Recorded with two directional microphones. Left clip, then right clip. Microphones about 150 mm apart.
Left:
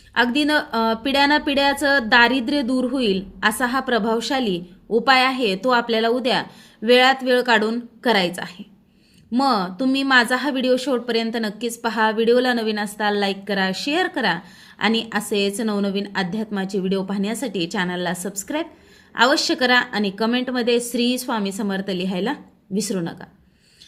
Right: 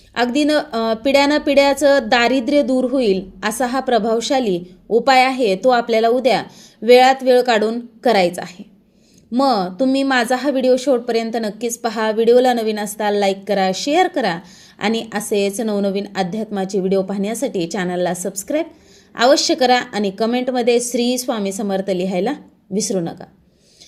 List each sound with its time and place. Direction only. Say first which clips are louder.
0.1 s a woman's voice: right 2 dB; 20° right (ahead or behind)